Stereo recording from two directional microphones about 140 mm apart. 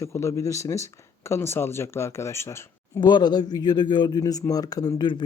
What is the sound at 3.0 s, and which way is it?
Speech, 30° left (ahead or behind).